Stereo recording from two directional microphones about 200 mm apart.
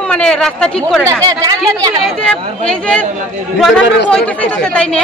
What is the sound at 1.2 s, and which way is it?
Speech, 20° right (ahead or behind).